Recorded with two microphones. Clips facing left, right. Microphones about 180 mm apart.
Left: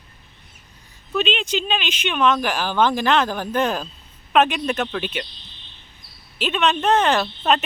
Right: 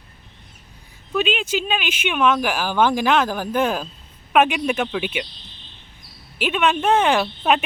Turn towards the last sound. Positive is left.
turn(degrees=-10)  # may be behind; listen again after turning